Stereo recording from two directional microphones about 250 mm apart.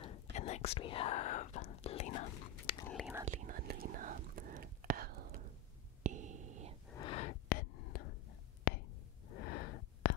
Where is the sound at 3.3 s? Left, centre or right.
Right.